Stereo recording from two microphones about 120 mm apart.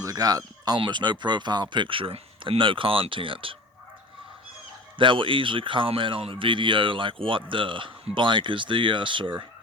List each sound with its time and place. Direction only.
0.0 s speech: 30° right (ahead or behind); by 3.6 s 45° right (ahead or behind)
4.9 s speech: 45° right (ahead or behind)